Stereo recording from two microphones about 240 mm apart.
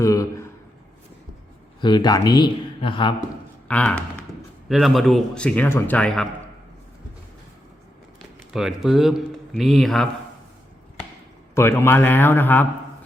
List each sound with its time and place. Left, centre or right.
0.0 s a sound: centre
1.8 s speech: centre
3.7 s a man's voice: centre
8.5 s a man's voice: centre
11.5 s speech: centre